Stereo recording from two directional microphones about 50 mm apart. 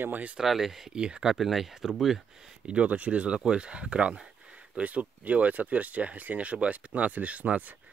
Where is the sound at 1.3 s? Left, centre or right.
Centre.